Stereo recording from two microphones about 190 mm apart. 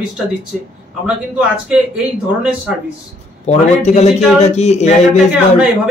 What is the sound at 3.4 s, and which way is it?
Speech, 35° left (ahead or behind).